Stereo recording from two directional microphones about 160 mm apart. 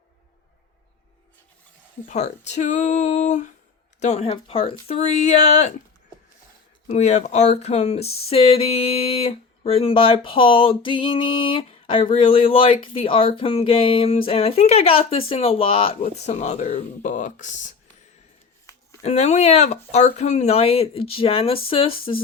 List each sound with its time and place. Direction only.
2.0 s speech: 45° left (ahead or behind)
6.8 s speech: 45° left (ahead or behind)
19.0 s speech: 45° left (ahead or behind)